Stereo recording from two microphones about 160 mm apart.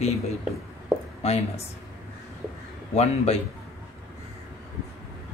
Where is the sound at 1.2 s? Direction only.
40° left (ahead or behind).